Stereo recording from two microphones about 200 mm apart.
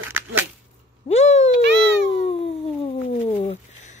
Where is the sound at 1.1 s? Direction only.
35° left (ahead or behind).